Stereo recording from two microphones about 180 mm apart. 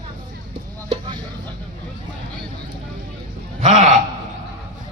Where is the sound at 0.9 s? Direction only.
25° right (ahead or behind).